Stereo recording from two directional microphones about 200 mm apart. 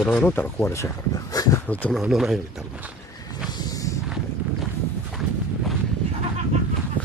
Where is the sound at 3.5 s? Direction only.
20° left (ahead or behind).